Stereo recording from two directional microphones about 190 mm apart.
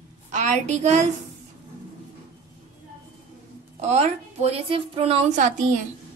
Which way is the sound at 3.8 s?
35° right (ahead or behind).